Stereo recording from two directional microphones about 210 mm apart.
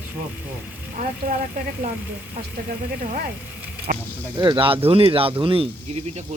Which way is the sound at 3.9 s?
40° right (ahead or behind).